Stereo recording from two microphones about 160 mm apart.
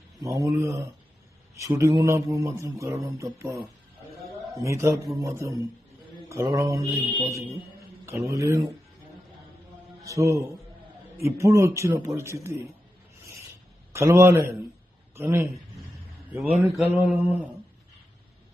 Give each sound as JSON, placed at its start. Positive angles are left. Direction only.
{"t": 0.2, "sound": "speech", "side_deg": -20}
{"t": 4.6, "sound": "a man's voice", "side_deg": -20}
{"t": 8.0, "sound": "speech", "side_deg": -20}
{"t": 10.1, "sound": "a man's voice", "side_deg": -20}
{"t": 13.9, "sound": "a man's voice", "side_deg": -15}